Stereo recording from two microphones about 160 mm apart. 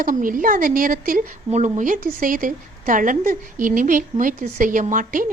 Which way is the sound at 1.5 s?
45° right (ahead or behind).